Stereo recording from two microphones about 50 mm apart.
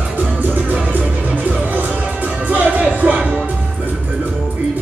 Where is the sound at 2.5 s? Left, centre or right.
Right.